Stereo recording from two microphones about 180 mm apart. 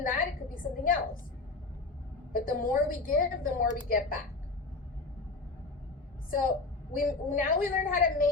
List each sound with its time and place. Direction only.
0.1 s a sound: 50° left (ahead or behind)
2.3 s a woman's voice: 50° left (ahead or behind)
6.9 s a woman's voice: 50° left (ahead or behind)